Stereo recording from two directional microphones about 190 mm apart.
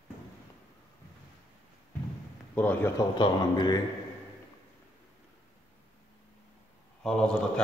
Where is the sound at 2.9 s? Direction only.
25° left (ahead or behind).